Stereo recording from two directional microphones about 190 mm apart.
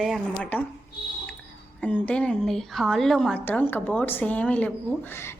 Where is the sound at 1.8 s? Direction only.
5° left (ahead or behind).